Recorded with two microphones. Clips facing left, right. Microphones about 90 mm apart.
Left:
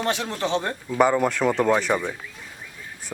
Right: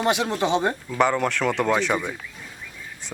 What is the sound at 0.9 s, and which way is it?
Speech, 10° left (ahead or behind).